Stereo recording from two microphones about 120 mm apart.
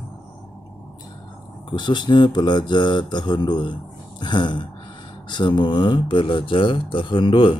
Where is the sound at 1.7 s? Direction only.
40° left (ahead or behind).